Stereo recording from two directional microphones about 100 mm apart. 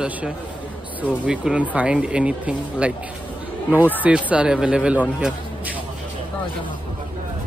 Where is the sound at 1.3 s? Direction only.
10° right (ahead or behind).